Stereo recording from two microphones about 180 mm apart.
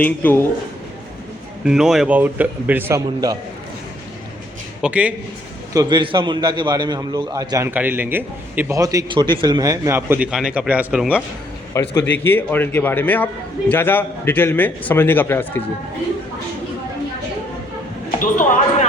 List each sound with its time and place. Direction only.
0.0 s a man's voice: 10° left (ahead or behind)
1.6 s a man's voice: 5° right (ahead or behind); by 3.3 s 20° right (ahead or behind)
4.8 s a man's voice: 5° right (ahead or behind)
5.7 s a man's voice: 20° right (ahead or behind); by 11.2 s 5° right (ahead or behind)
11.7 s a man's voice: 15° left (ahead or behind)
18.2 s speech: 45° left (ahead or behind)